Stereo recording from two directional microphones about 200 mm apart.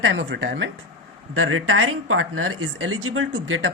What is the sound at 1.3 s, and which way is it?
Speech, 85° right.